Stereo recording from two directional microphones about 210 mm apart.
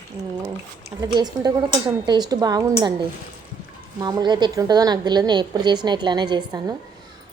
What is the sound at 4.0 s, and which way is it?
A woman's voice, 20° right (ahead or behind).